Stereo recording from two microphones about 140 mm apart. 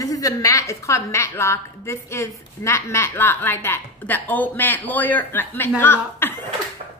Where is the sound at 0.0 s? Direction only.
25° left (ahead or behind).